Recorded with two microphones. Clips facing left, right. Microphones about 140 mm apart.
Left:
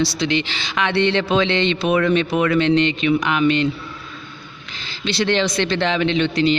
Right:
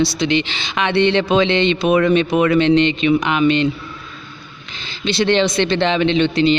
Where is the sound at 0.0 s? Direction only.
20° right (ahead or behind).